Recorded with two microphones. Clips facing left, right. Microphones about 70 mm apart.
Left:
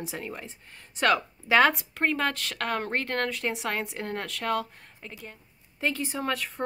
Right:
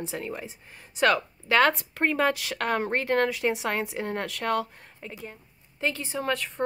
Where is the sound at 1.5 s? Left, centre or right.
Centre.